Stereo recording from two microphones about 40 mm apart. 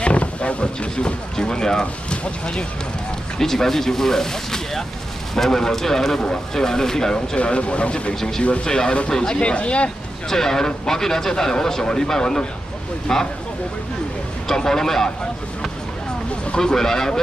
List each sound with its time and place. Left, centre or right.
0.0 s a sound: left
1.3 s speech: centre
3.3 s speech: centre
7.3 s speech: left
8.1 s speech: centre
8.4 s speech: left
9.1 s speech: centre
9.4 s speech: left
10.3 s speech: centre
14.5 s speech: centre
16.5 s speech: centre